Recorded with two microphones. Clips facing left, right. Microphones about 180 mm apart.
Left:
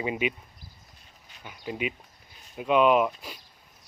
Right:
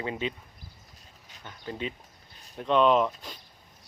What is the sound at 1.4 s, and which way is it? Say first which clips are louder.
Speech: left 3 dB; 10° left (ahead or behind).